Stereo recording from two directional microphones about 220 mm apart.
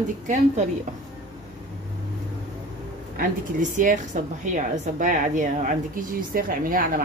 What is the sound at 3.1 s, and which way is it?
A woman's voice, 35° right (ahead or behind).